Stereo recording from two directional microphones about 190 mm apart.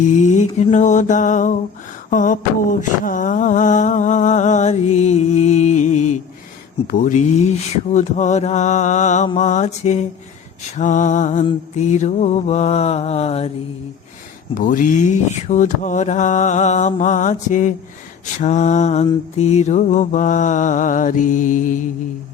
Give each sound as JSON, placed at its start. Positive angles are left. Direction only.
{"t": 0.0, "sound": "mantra", "side_deg": 40}
{"t": 14.5, "sound": "mantra", "side_deg": 45}